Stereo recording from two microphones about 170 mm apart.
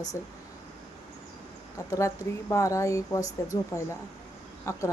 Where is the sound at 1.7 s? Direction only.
20° left (ahead or behind).